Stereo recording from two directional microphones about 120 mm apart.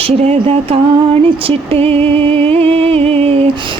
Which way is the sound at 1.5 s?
50° right (ahead or behind).